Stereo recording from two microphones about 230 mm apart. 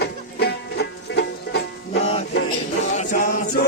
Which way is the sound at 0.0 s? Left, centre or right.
Left.